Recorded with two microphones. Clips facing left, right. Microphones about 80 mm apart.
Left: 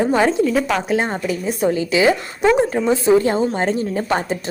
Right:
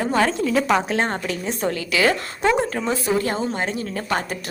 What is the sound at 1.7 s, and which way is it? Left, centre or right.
A woman's voice, centre.